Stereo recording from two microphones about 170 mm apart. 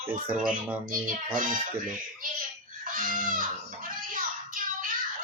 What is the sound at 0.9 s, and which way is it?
Speech, 55° right (ahead or behind).